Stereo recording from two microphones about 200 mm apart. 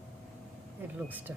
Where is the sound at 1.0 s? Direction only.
10° right (ahead or behind).